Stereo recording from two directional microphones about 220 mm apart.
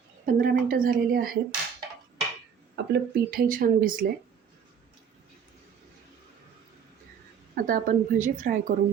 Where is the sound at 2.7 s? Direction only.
45° right (ahead or behind).